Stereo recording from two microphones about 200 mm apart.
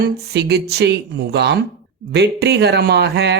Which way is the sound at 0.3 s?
55° right (ahead or behind).